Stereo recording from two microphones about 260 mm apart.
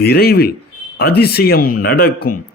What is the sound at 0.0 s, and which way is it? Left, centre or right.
Speech, left.